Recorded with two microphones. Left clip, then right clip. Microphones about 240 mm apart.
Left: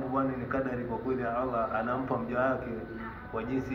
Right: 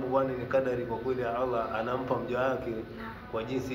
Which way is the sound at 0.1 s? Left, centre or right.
Right.